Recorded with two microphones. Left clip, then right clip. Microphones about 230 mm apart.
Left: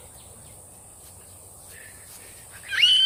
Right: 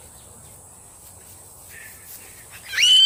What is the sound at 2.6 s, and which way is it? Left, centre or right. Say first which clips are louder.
Goose: right 4 dB; right.